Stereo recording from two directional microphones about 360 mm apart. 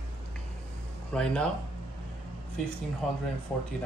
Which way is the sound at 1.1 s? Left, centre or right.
Centre.